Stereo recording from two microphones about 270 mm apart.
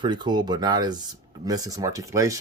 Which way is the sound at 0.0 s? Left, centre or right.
Centre.